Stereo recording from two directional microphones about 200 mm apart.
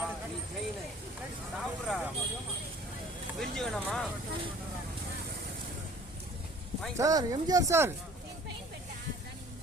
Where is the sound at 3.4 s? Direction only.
Centre (ahead or behind).